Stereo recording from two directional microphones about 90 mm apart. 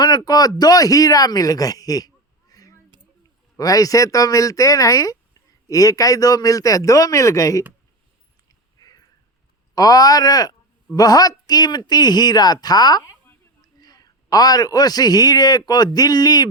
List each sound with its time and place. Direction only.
0.3 s a man's voice: 45° left (ahead or behind)
8.4 s a sound: 45° left (ahead or behind)
9.7 s a man's voice: 45° left (ahead or behind)